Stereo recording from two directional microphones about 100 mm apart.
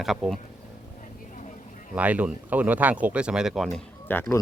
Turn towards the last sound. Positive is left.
turn(degrees=20)  # may be behind; listen again after turning